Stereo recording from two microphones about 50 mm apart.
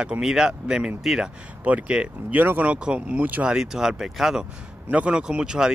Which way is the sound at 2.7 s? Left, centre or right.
Right.